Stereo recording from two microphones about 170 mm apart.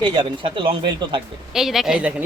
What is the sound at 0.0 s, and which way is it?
Speech, 30° right (ahead or behind).